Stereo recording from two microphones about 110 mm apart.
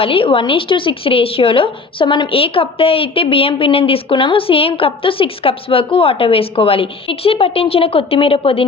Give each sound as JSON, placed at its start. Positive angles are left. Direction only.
{"t": 0.0, "sound": "speech", "side_deg": 55}